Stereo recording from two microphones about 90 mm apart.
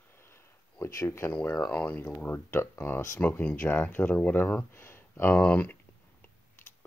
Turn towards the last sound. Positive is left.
turn(degrees=20)  # may be behind; listen again after turning